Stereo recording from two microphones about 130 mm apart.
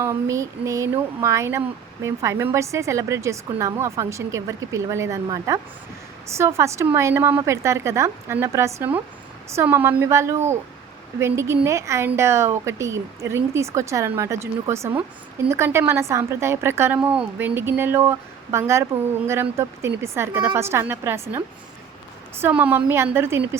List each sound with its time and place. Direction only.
0.0 s a woman's voice: 20° right (ahead or behind)